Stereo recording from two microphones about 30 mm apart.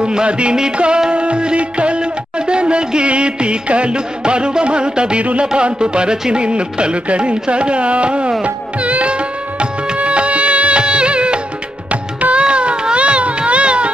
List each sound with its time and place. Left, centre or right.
0.0 s music: right
11.9 s music: right
12.4 s music: right